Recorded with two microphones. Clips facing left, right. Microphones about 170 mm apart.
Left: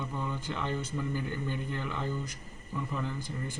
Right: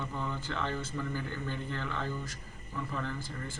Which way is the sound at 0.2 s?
15° left (ahead or behind).